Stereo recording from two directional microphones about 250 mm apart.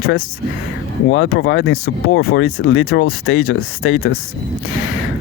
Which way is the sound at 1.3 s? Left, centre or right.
Left.